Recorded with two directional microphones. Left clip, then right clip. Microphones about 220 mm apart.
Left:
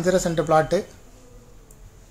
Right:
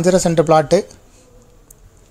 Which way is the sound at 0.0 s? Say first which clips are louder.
Right 7 dB; 35° right (ahead or behind).